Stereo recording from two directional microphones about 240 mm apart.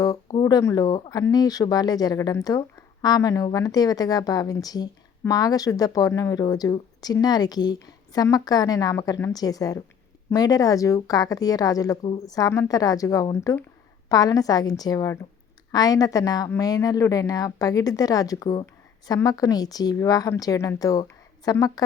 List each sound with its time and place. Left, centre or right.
0.0 s speech: centre